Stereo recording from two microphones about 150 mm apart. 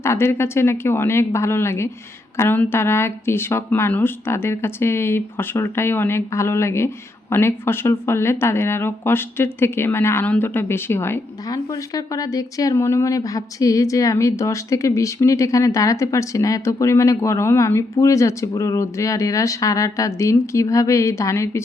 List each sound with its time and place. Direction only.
0.0 s a woman's voice: 15° left (ahead or behind)